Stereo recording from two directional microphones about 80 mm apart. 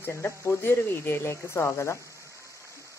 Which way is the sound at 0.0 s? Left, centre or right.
Left.